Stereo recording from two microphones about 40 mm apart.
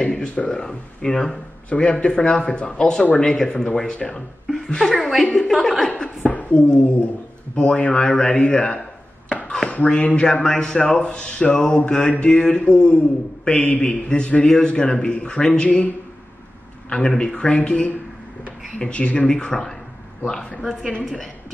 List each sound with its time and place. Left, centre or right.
0.0 s speech: left
1.7 s a woman's voice: left; by 5.9 s centre
6.0 s speech: left
8.4 s a man's voice: left
10.4 s speech: centre
11.5 s a woman's voice: centre
12.0 s a man's voice: left
12.3 s a man's voice: left
16.9 s speech: left
17.6 s a man's voice: left; by 20.6 s centre